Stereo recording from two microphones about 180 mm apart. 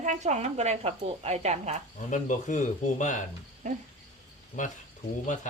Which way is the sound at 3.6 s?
45° right (ahead or behind).